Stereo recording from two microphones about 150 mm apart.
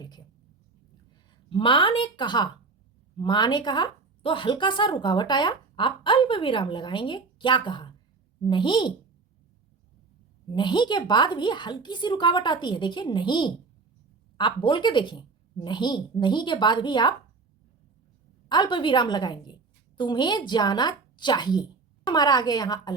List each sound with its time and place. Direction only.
1.5 s a woman's voice: 35° left (ahead or behind)
10.5 s a woman's voice: 30° left (ahead or behind)
18.4 s a woman's voice: 30° left (ahead or behind)